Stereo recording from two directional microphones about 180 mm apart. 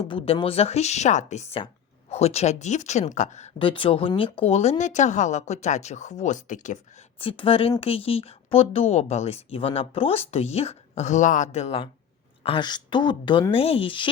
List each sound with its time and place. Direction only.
0.0 s speech: 30° left (ahead or behind)
7.2 s a woman's voice: 30° left (ahead or behind)